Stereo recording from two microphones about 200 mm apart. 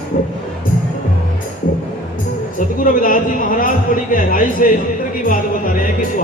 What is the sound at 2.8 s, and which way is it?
Speech, 45° left (ahead or behind).